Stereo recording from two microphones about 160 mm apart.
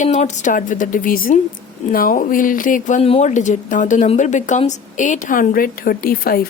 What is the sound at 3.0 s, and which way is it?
A woman's voice, 40° left (ahead or behind).